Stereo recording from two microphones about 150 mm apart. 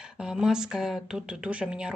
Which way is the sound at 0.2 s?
5° right (ahead or behind).